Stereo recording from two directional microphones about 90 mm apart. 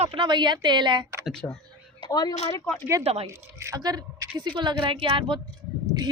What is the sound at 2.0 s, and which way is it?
Speech, 45° left (ahead or behind).